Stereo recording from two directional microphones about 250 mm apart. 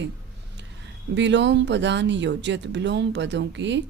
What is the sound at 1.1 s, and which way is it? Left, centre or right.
Speech, right.